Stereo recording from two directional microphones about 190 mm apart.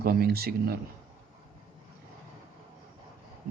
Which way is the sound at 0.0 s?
55° right (ahead or behind).